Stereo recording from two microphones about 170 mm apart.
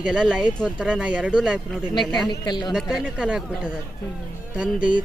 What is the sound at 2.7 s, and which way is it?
A man's voice, 5° right (ahead or behind).